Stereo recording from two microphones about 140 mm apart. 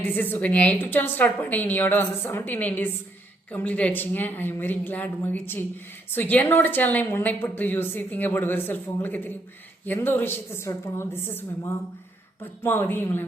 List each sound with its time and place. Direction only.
0.0 s a woman's voice: 15° left (ahead or behind)